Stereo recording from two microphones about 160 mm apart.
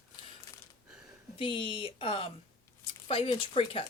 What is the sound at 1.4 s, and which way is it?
Speech, 35° left (ahead or behind).